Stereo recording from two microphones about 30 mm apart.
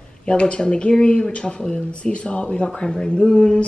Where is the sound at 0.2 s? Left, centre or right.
Left.